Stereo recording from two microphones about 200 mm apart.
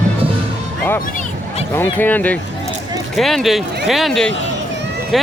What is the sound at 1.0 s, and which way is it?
Hubbub, 40° left (ahead or behind).